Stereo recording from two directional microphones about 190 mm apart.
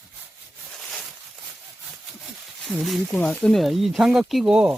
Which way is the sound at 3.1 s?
5° left (ahead or behind).